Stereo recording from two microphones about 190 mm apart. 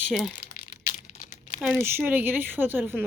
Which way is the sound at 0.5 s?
40° left (ahead or behind).